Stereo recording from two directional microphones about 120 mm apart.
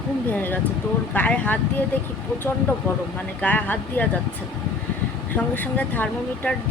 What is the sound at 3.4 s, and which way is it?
Speech, 15° left (ahead or behind).